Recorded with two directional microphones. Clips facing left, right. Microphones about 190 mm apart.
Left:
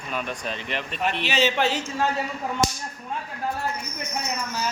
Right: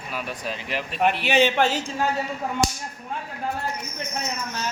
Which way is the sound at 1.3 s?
55° right (ahead or behind).